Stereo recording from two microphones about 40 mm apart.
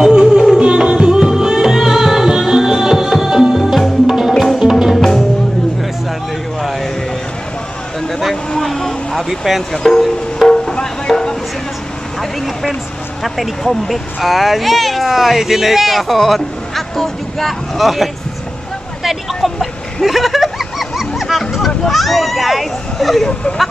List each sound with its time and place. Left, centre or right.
0.0 s music: centre
4.9 s music: centre
6.6 s a sound: centre
8.1 s a sound: centre
8.5 s vehicle: centre
9.7 s music: centre
12.2 s vehicle: centre
13.2 s speech: centre
19.0 s vehicle: centre
21.2 s a sound: centre